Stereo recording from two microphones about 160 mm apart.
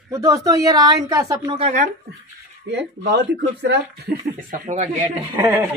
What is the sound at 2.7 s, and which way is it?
Speech, 90° right.